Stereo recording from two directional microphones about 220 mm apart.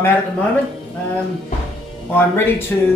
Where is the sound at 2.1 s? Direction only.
10° left (ahead or behind).